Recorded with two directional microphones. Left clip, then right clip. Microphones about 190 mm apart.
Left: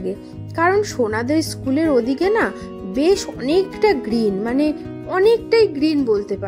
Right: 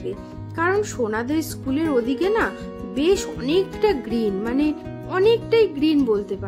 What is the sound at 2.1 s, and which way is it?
Speech, 25° left (ahead or behind).